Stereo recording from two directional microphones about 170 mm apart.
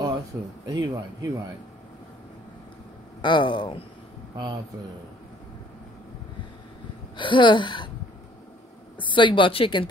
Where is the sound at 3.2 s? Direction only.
25° left (ahead or behind).